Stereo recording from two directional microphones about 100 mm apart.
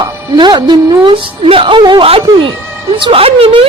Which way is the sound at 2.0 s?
75° right (ahead or behind).